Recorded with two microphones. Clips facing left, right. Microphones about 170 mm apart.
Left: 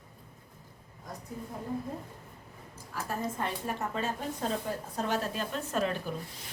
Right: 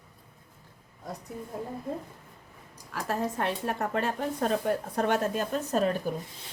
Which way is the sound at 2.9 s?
80° right.